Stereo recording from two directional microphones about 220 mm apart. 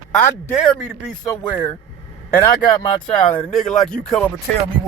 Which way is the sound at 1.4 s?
20° left (ahead or behind).